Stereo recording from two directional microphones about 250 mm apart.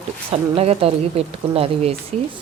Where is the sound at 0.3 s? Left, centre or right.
Right.